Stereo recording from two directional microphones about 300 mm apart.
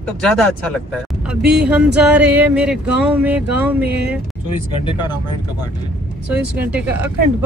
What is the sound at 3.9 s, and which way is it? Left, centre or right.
Speech, right.